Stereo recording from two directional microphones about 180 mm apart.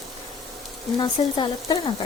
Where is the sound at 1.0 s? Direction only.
25° left (ahead or behind).